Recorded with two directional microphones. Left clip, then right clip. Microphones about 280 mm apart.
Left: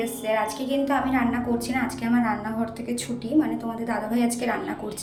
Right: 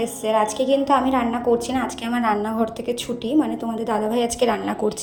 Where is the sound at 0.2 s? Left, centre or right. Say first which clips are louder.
Right 7 dB; right.